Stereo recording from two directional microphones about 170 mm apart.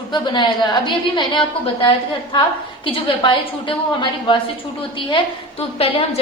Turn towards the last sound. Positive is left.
turn(degrees=35)  # may be behind; listen again after turning